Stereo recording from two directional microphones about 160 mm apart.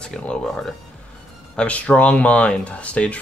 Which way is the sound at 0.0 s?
5° left (ahead or behind).